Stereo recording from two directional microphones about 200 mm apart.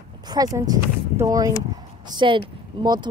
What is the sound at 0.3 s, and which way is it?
Speech, 20° right (ahead or behind).